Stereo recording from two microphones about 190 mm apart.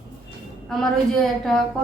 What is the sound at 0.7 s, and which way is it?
Speech, 5° left (ahead or behind).